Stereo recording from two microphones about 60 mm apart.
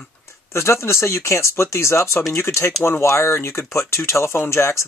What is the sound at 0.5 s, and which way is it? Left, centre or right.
Speech, left.